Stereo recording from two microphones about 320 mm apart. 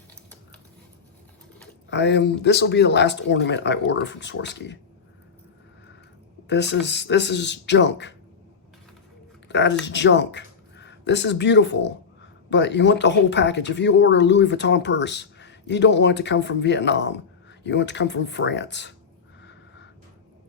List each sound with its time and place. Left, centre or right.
1.9 s speech: left
6.5 s speech: left
9.5 s speech: left